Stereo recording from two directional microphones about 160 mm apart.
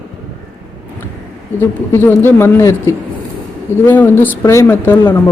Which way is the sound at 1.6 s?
15° left (ahead or behind).